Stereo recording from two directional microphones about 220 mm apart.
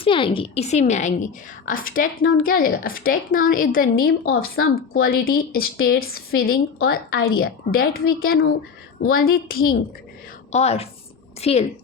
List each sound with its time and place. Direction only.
0.0 s a woman's voice: 25° left (ahead or behind); by 9.2 s 45° left (ahead or behind)
10.5 s a woman's voice: 30° left (ahead or behind)